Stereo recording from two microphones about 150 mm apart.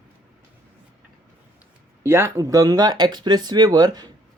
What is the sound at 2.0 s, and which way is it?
Speech, 15° right (ahead or behind).